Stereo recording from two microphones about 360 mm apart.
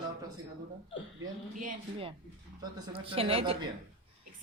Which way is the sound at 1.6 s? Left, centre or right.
Right.